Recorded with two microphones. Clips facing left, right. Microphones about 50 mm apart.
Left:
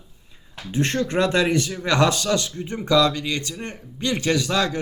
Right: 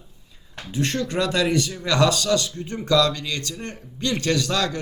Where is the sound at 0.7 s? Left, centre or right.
Left.